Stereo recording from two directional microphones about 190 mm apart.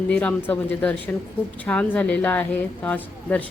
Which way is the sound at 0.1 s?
5° left (ahead or behind).